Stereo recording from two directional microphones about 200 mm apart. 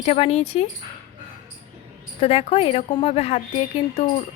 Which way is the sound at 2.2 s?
30° left (ahead or behind).